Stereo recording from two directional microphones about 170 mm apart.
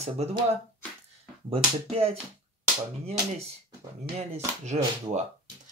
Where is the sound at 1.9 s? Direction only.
35° right (ahead or behind).